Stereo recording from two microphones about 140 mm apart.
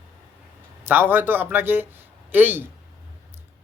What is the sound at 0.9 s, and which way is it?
Speech, 15° right (ahead or behind).